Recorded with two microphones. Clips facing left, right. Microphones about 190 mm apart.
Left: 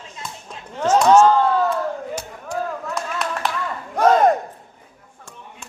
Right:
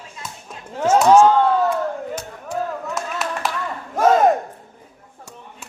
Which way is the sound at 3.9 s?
5° right (ahead or behind).